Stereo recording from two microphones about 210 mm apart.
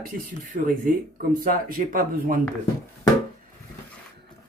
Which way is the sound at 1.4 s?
40° right (ahead or behind).